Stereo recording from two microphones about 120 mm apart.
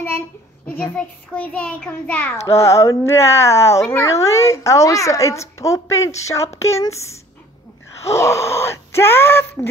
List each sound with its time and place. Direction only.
0.7 s a child's voice: 15° left (ahead or behind)
8.0 s speech: 25° left (ahead or behind)